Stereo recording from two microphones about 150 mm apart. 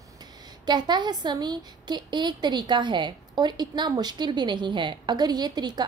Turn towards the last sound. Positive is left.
turn(degrees=-30)  # may be behind; listen again after turning